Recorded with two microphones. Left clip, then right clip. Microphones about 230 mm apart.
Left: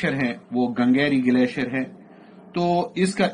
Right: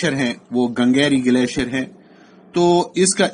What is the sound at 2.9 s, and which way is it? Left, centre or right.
Speech, right.